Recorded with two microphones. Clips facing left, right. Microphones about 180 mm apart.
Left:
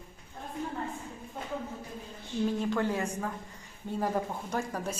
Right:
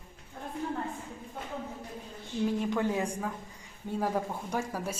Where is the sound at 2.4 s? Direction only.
10° right (ahead or behind).